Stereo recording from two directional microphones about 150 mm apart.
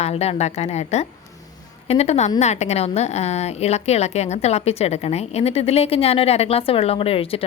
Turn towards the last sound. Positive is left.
turn(degrees=40)  # may be behind; listen again after turning